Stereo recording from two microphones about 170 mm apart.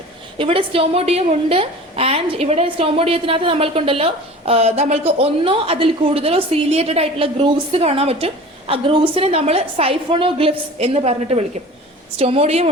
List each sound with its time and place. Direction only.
0.3 s a woman's voice: 30° right (ahead or behind)